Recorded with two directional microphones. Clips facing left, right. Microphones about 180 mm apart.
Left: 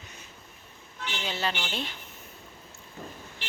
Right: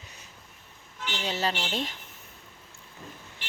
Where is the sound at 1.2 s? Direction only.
35° right (ahead or behind).